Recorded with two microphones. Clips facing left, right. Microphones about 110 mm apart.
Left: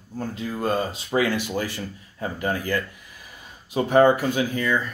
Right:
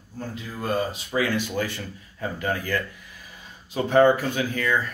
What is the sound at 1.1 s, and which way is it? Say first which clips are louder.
Speech: left 3 dB; 35° left (ahead or behind).